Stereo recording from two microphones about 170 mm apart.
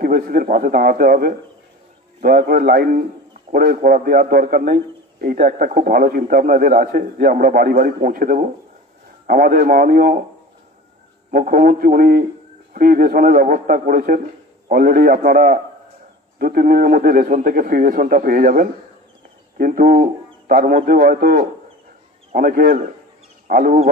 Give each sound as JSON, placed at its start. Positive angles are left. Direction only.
{"t": 0.0, "sound": "a man's voice", "side_deg": -55}
{"t": 11.2, "sound": "a man's voice", "side_deg": -55}